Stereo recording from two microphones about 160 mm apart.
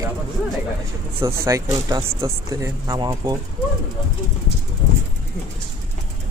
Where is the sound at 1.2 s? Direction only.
15° right (ahead or behind).